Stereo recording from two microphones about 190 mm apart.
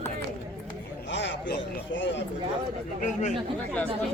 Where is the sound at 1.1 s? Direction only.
70° left (ahead or behind).